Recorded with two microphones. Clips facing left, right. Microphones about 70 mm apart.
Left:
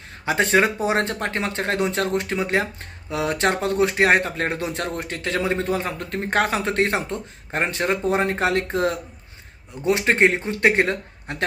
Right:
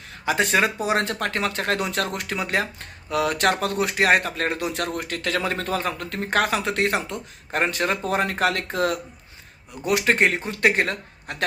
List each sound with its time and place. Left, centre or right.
0.3 s speech: left